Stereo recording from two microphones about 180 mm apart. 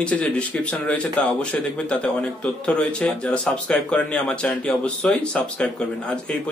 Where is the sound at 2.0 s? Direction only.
5° left (ahead or behind).